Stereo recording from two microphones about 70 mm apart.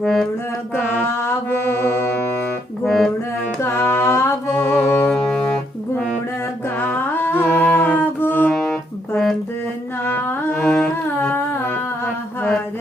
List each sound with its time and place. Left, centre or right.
0.0 s mantra: centre
0.8 s music: left
2.8 s music: centre
3.6 s music: left
4.6 s music: centre
6.7 s a sound: left
7.4 s music: centre
8.4 s music: centre
10.1 s music: left
10.5 s carnatic music: centre
11.3 s music: left